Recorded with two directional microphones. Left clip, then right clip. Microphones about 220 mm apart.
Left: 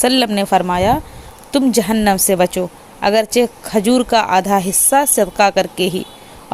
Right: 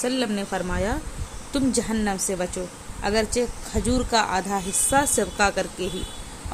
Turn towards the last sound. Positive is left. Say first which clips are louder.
# left 9 dB
turn(degrees=40)  # may be behind; listen again after turning